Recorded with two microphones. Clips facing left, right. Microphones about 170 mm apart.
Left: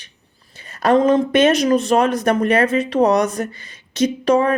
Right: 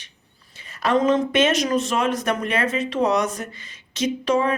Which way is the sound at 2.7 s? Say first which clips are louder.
Left 6 dB; 60° left (ahead or behind).